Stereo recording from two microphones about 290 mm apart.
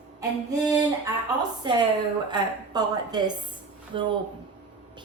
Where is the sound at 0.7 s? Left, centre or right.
Centre.